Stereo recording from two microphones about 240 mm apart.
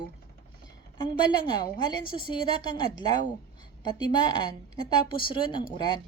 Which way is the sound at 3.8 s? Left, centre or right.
Centre.